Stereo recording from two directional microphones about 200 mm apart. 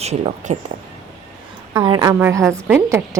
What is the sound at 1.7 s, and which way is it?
A woman's voice, 20° right (ahead or behind).